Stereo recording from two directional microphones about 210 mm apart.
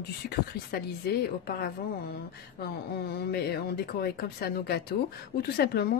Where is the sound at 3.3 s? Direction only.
50° left (ahead or behind).